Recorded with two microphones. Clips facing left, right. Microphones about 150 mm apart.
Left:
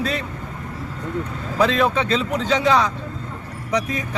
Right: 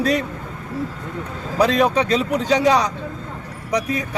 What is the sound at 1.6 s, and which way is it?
Speech, 15° right (ahead or behind).